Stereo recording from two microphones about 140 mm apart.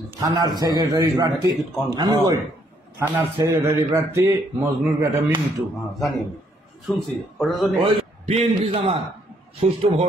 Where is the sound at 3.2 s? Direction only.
20° right (ahead or behind).